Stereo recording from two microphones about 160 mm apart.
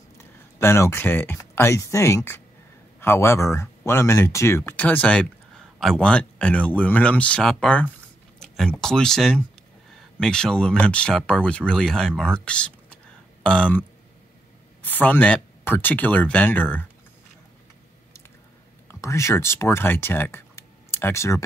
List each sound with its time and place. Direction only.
0.2 s speech: 15° left (ahead or behind)
18.9 s speech: 20° left (ahead or behind)